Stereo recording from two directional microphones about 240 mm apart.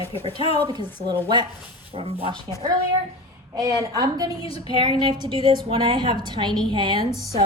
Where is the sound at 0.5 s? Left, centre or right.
Centre.